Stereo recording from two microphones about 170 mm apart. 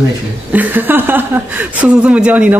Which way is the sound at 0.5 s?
10° right (ahead or behind).